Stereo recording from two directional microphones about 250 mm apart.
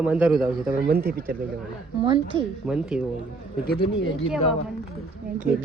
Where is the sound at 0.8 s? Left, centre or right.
Right.